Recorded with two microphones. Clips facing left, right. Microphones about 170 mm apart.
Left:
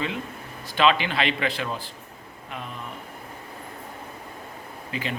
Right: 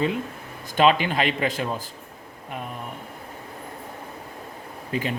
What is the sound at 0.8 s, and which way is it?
Speech, 45° right (ahead or behind).